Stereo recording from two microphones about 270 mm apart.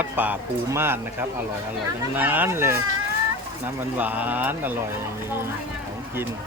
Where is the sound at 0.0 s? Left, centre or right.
Centre.